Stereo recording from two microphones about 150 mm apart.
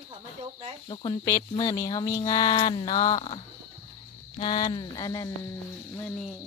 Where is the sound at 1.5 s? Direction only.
25° left (ahead or behind).